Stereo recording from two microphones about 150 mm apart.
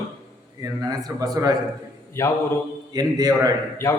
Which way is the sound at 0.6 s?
25° right (ahead or behind).